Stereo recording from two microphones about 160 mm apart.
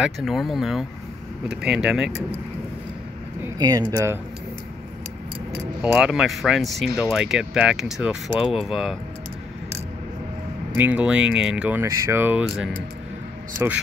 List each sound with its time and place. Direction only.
0.0 s speech: centre (ahead or behind)
3.4 s speech: 25° right (ahead or behind)
5.5 s keys jangling: 15° right (ahead or behind)
5.9 s speech: 5° right (ahead or behind)
10.7 s speech: 10° right (ahead or behind)